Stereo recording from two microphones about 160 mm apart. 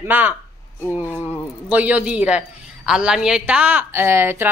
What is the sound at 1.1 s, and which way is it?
Speech, 10° left (ahead or behind).